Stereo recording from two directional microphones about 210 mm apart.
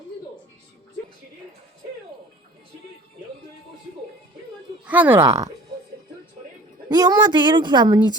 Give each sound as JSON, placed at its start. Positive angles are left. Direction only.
{"t": 4.9, "sound": "speech", "side_deg": -10}
{"t": 6.8, "sound": "speech", "side_deg": -20}